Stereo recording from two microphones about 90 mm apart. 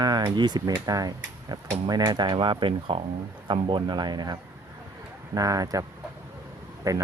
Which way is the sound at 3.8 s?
55° right (ahead or behind).